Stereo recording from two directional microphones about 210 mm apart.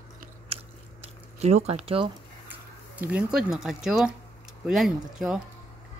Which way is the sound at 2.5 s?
10° right (ahead or behind).